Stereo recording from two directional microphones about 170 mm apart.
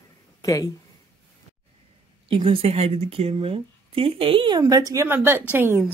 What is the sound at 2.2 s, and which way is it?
A woman's voice, 30° right (ahead or behind).